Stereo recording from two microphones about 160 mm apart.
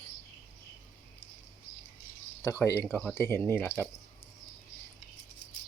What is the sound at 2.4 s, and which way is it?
Speech, 15° left (ahead or behind).